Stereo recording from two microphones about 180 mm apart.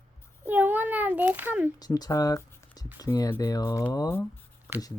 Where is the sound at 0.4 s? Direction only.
10° right (ahead or behind).